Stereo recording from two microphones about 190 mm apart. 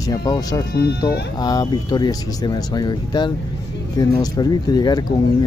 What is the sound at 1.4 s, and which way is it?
Speech, 20° left (ahead or behind).